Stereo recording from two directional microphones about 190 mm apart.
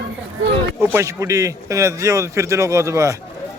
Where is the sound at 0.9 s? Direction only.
15° right (ahead or behind).